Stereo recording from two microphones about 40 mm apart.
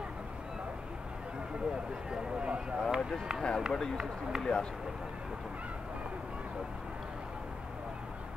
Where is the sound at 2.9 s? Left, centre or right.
Centre.